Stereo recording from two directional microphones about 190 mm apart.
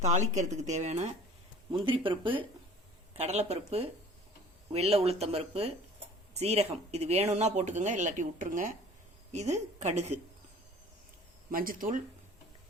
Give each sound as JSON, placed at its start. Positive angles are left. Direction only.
{"t": 0.0, "sound": "speech", "side_deg": -40}
{"t": 1.7, "sound": "speech", "side_deg": -25}
{"t": 11.5, "sound": "speech", "side_deg": -45}